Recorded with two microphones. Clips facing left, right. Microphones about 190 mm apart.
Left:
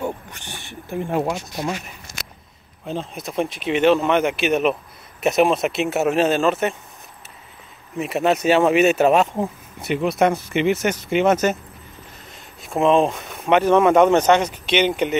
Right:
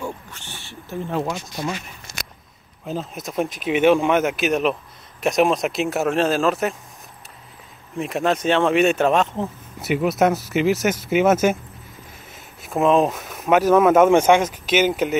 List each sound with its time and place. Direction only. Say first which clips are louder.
0.0 s a sound: left 4 dB; 15° left (ahead or behind)
2.8 s speech: even; centre (ahead or behind)
8.0 s speech: left 2 dB; 5° left (ahead or behind)
9.8 s speech: even; 5° right (ahead or behind)